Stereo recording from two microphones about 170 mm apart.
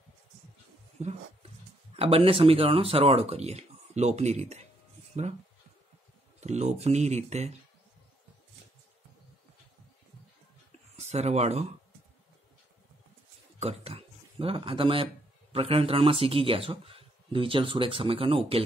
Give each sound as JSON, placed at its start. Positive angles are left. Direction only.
{"t": 0.9, "sound": "a sound", "side_deg": -40}
{"t": 2.0, "sound": "speech", "side_deg": -35}
{"t": 6.4, "sound": "speech", "side_deg": -40}
{"t": 11.0, "sound": "speech", "side_deg": -40}
{"t": 13.6, "sound": "speech", "side_deg": -35}